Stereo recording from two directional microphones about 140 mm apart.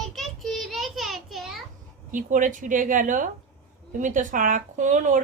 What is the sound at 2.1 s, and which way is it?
Speech, 70° right (ahead or behind).